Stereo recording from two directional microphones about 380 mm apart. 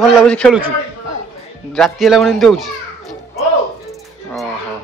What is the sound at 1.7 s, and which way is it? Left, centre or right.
A man's voice, centre.